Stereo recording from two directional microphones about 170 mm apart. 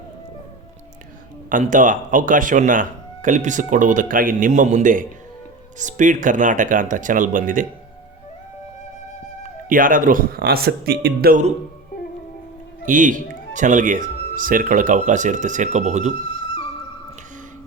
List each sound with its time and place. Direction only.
1.5 s speech: 50° right (ahead or behind)
9.6 s speech: 55° right (ahead or behind)
12.8 s speech: 50° right (ahead or behind)